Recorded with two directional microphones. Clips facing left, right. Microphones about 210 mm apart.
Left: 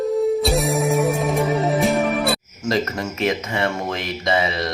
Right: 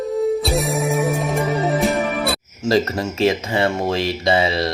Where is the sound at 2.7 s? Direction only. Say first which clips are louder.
Right 4 dB; 35° right (ahead or behind).